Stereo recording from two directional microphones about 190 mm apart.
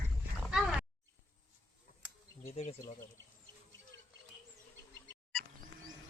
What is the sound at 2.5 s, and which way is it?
Speech, 30° left (ahead or behind).